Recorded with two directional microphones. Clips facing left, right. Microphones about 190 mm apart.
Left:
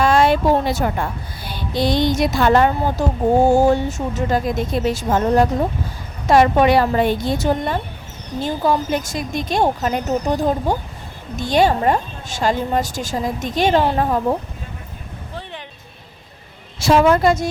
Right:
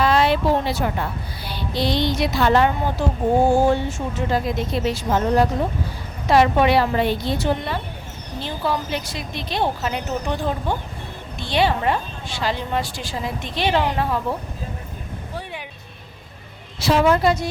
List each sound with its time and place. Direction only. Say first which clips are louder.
0.0 s speech: left 3 dB; 45° left (ahead or behind)
1.5 s music: left 3 dB; 45° left (ahead or behind)
3.4 s a woman's voice: left 3 dB; 40° left (ahead or behind)
16.8 s a woman's voice: left 3 dB; 50° left (ahead or behind)